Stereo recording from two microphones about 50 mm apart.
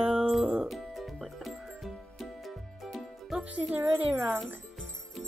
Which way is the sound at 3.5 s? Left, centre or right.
Right.